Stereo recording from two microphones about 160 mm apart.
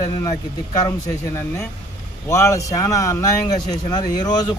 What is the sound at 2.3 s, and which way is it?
Speech, 20° left (ahead or behind).